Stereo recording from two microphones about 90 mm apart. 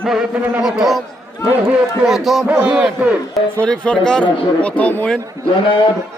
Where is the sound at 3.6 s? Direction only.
10° left (ahead or behind).